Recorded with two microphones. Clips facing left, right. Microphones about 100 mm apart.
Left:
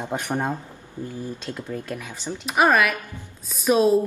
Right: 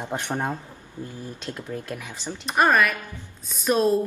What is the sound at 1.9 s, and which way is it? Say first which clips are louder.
Speech: left 2 dB; 15° right (ahead or behind).